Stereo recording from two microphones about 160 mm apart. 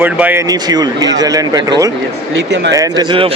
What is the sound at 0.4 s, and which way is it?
Speech, 25° right (ahead or behind).